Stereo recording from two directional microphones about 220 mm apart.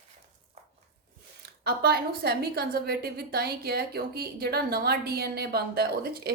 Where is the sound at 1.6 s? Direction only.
45° right (ahead or behind).